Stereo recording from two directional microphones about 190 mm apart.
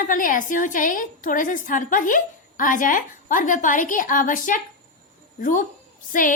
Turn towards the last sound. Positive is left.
turn(degrees=45)  # may be behind; listen again after turning